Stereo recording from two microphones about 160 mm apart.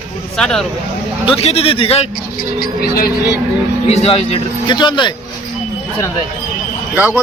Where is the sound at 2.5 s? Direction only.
70° left (ahead or behind).